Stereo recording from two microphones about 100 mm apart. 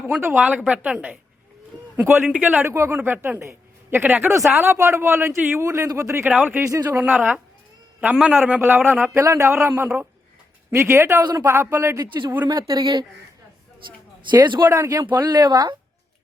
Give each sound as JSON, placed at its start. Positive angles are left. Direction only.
{"t": 0.0, "sound": "a woman's voice", "side_deg": -20}
{"t": 2.3, "sound": "a woman's voice", "side_deg": -15}
{"t": 2.6, "sound": "speech", "side_deg": -25}
{"t": 6.8, "sound": "a woman's voice", "side_deg": -20}
{"t": 9.1, "sound": "speech", "side_deg": -30}
{"t": 11.2, "sound": "speech", "side_deg": -45}
{"t": 11.4, "sound": "speech", "side_deg": -25}
{"t": 14.3, "sound": "speech", "side_deg": -50}
{"t": 14.7, "sound": "speech", "side_deg": -35}